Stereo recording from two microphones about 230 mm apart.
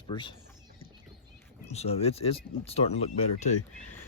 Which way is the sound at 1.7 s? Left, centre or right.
Left.